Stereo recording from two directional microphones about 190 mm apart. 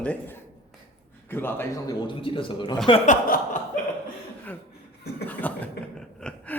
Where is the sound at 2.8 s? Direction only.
35° left (ahead or behind).